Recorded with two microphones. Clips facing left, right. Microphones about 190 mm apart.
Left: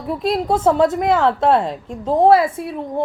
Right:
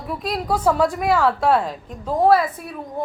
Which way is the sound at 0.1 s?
25° left (ahead or behind).